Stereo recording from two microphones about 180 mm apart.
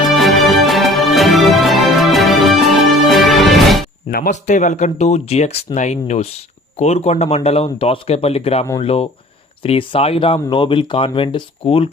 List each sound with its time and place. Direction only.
0.0 s music: centre (ahead or behind)
4.1 s speech: 50° left (ahead or behind); by 11.9 s 30° left (ahead or behind)